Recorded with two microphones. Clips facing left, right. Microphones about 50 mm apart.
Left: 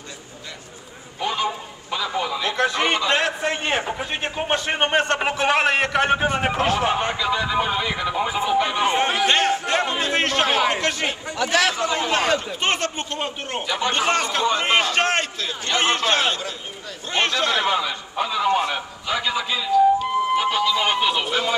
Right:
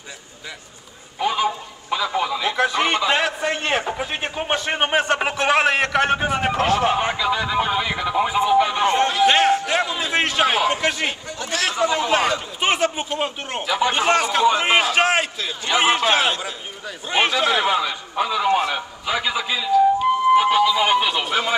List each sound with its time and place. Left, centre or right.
1.2 s a man's voice: centre
8.8 s speech: centre
9.2 s a man's voice: centre